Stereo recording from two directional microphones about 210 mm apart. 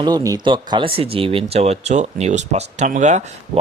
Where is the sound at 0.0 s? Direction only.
15° right (ahead or behind).